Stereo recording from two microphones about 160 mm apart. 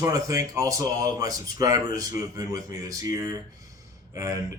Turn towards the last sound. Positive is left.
turn(degrees=-20)  # may be behind; listen again after turning